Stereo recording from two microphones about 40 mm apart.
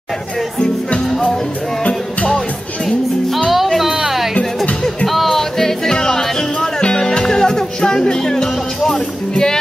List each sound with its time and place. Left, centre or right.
3.4 s music: centre